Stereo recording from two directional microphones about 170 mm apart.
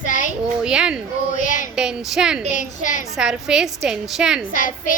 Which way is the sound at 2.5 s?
50° left (ahead or behind).